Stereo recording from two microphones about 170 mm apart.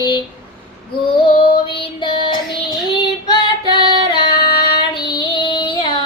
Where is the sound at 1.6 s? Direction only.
30° left (ahead or behind).